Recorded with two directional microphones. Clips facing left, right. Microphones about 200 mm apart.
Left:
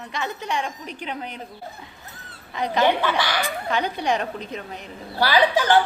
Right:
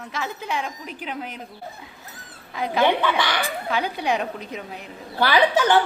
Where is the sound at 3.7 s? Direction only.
5° right (ahead or behind).